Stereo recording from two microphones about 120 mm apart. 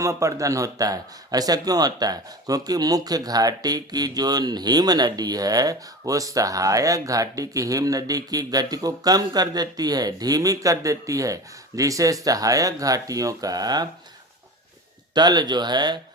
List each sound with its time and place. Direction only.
0.0 s speech: 25° right (ahead or behind)
15.1 s speech: 35° right (ahead or behind)